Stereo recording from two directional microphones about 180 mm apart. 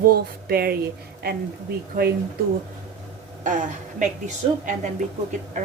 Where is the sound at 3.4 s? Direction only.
45° right (ahead or behind).